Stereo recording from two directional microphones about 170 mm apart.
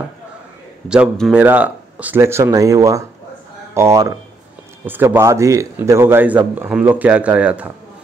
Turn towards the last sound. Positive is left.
turn(degrees=-5)  # may be behind; listen again after turning